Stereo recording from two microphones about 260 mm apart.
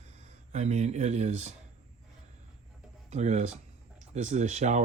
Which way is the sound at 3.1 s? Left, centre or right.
Right.